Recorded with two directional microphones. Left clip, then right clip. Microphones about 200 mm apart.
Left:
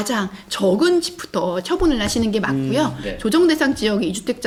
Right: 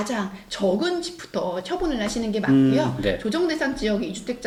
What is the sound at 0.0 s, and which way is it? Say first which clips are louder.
Speech: left 5 dB; 60° left (ahead or behind).